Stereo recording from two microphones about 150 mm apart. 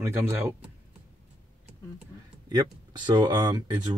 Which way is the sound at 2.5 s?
25° right (ahead or behind).